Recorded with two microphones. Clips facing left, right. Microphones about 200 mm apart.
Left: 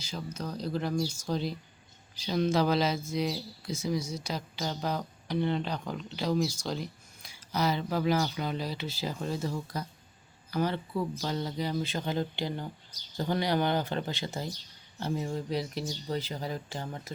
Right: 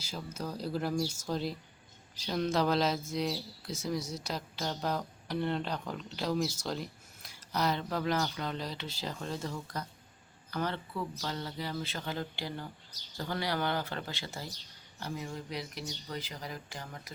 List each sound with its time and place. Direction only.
0.3 s speech: 5° right (ahead or behind); by 14.5 s 20° left (ahead or behind)
14.9 s speech: 30° left (ahead or behind)